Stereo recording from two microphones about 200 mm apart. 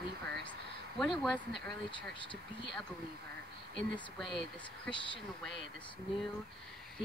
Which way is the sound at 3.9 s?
Centre (ahead or behind).